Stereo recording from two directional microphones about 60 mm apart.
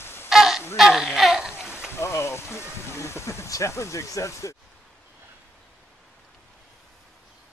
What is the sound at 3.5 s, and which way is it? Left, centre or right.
Speech, left.